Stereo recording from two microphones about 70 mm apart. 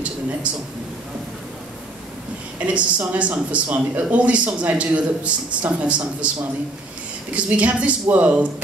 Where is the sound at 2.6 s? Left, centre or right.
Centre.